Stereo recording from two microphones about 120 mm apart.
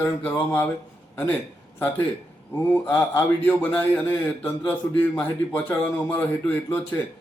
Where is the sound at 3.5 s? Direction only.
15° left (ahead or behind).